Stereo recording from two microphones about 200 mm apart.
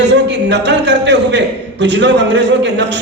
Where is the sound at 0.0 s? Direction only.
60° right (ahead or behind).